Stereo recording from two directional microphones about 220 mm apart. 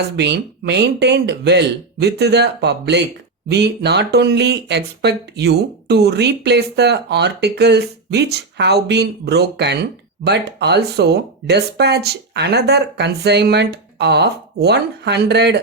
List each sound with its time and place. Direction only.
0.2 s speech: 50° right (ahead or behind)